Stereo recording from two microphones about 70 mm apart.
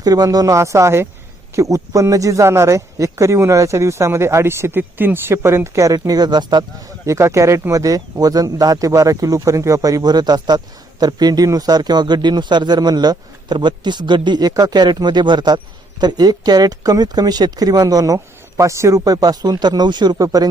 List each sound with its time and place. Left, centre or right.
0.0 s a man's voice: right
7.0 s a man's voice: right
7.7 s a man's voice: right
20.2 s speech: right